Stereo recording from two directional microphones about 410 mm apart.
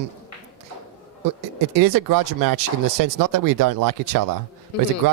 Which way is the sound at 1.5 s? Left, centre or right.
Right.